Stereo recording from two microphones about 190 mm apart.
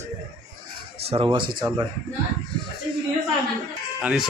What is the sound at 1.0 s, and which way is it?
Speech, 30° right (ahead or behind).